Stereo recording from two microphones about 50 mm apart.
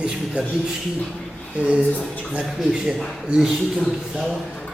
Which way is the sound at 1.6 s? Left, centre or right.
Right.